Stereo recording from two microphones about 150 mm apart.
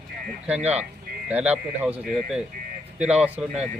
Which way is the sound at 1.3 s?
10° right (ahead or behind).